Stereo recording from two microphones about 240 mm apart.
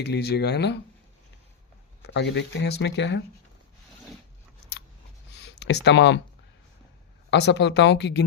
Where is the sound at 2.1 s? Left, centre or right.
Left.